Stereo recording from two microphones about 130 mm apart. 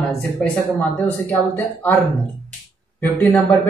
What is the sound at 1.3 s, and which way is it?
Speech, 15° left (ahead or behind).